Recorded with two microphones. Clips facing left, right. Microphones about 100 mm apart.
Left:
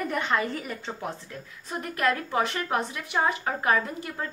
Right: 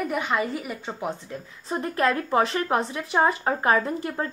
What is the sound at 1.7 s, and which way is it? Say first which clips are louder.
A woman's voice: right 3 dB; 30° right (ahead or behind).